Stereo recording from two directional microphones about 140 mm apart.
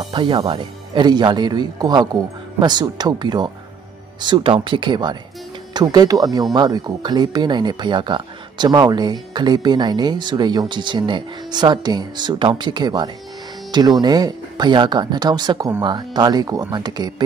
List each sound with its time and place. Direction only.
0.0 s speech: 35° right (ahead or behind)